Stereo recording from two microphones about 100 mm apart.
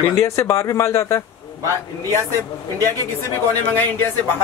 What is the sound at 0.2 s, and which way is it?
Speech, 30° left (ahead or behind).